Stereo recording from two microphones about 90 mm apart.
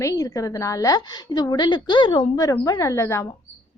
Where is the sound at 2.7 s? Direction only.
35° left (ahead or behind).